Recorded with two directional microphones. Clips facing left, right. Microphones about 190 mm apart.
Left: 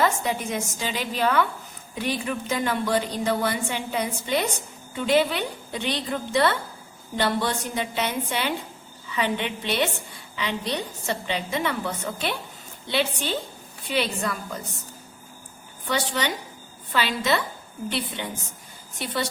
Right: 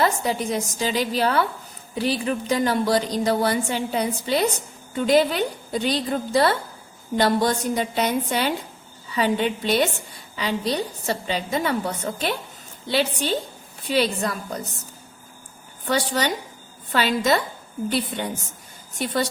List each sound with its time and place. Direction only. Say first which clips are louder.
0.0 s speech: right 2 dB; 35° right (ahead or behind)
15.9 s a woman's voice: right 3 dB; 40° right (ahead or behind)